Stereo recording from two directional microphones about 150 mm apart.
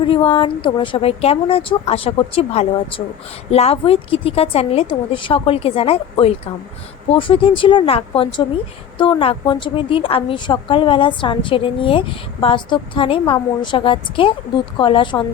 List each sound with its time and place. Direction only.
0.1 s a woman's voice: 35° left (ahead or behind)